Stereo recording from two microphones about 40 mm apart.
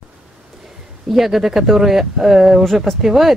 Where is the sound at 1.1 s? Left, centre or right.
Centre.